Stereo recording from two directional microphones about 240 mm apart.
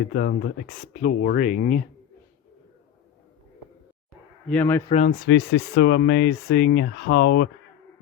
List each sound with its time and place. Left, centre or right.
0.0 s speech: left
4.4 s a man's voice: centre
4.9 s speech: left